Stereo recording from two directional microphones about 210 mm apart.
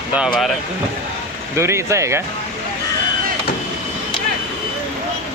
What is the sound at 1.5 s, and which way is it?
Speech, 10° right (ahead or behind).